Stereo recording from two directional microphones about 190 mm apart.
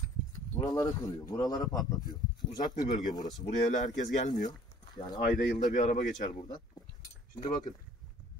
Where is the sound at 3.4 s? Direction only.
40° left (ahead or behind).